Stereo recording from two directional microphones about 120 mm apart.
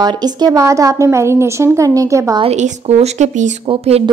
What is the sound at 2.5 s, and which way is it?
Speech, 70° right (ahead or behind).